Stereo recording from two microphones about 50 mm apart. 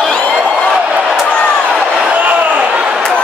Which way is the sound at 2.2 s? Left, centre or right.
Right.